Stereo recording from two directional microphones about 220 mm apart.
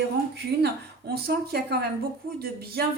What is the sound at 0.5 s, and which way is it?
Speech, 45° right (ahead or behind).